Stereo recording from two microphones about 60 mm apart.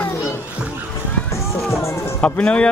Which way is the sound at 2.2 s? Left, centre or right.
Left.